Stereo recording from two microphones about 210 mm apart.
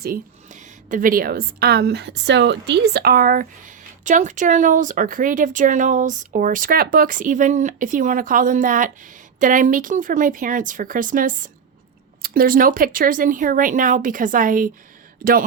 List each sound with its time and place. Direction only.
0.0 s a woman's voice: 40° right (ahead or behind)